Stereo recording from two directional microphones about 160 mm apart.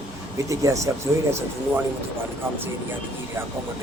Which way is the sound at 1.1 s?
20° right (ahead or behind).